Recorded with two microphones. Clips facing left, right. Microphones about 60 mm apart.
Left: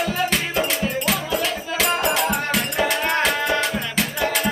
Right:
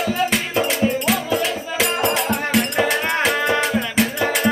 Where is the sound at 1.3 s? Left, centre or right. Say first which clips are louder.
Right 2 dB; centre.